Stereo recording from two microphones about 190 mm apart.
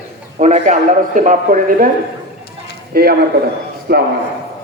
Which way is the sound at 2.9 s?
55° right (ahead or behind).